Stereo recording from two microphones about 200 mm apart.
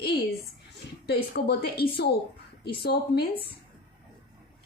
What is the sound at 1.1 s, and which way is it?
A woman's voice, 55° left (ahead or behind).